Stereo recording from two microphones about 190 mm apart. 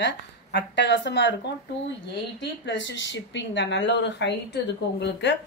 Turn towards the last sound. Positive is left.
turn(degrees=65)  # may be behind; listen again after turning